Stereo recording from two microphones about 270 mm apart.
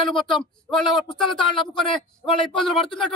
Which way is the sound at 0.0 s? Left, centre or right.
Centre.